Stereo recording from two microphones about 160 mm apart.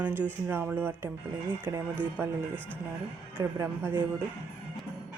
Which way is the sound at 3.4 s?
15° right (ahead or behind).